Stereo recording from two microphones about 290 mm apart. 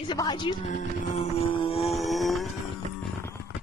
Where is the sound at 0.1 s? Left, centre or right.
Centre.